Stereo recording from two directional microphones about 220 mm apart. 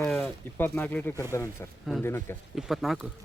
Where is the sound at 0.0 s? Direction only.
5° left (ahead or behind).